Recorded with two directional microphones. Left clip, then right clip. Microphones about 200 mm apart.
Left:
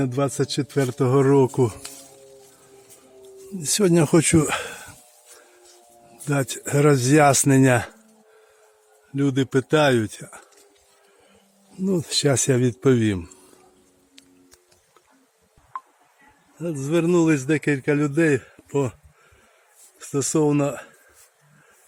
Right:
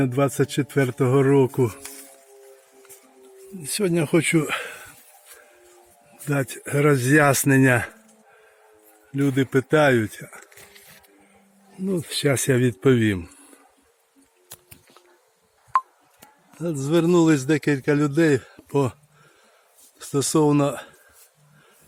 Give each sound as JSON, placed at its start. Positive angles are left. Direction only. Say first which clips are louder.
{"t": 0.0, "sound": "a man's voice", "louder": "right 2 dB", "side_deg": -5}
{"t": 3.6, "sound": "speech", "louder": "left 4 dB", "side_deg": 30}
{"t": 6.2, "sound": "speech", "louder": "left 1 dB", "side_deg": 10}
{"t": 9.1, "sound": "a man's voice", "louder": "even", "side_deg": 5}
{"t": 11.9, "sound": "speech", "louder": "left 2 dB", "side_deg": 15}
{"t": 16.6, "sound": "a man's voice", "louder": "right 1 dB", "side_deg": -5}
{"t": 20.0, "sound": "a man's voice", "louder": "right 1 dB", "side_deg": 0}